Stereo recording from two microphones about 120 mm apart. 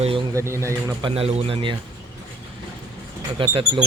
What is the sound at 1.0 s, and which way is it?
Speech, 55° right (ahead or behind).